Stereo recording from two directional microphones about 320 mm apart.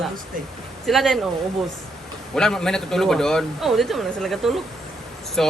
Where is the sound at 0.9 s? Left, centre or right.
Centre.